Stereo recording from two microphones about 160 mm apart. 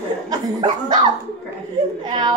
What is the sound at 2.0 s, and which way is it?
Speech, 25° right (ahead or behind).